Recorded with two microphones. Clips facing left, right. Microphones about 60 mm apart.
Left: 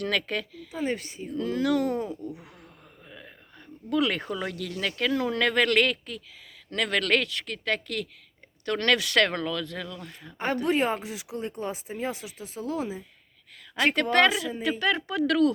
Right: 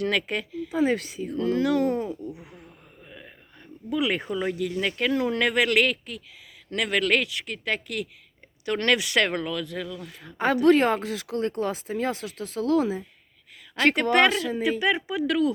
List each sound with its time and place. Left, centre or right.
0.0 s speech: centre
0.9 s speech: right
1.3 s speech: right; by 2.7 s centre
3.1 s a sound: centre
3.8 s speech: centre
10.3 s speech: right
13.9 s speech: centre
14.3 s a woman's voice: centre
14.8 s speech: centre